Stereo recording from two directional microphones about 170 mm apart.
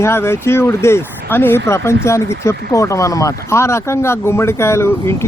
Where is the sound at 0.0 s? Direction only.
15° left (ahead or behind).